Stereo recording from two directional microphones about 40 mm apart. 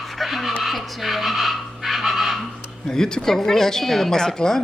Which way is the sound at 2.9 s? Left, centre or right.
Centre.